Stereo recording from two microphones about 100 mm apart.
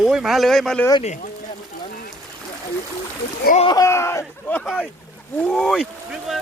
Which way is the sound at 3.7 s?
30° left (ahead or behind).